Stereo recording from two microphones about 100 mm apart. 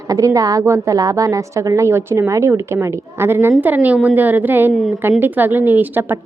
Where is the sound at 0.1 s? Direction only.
35° right (ahead or behind).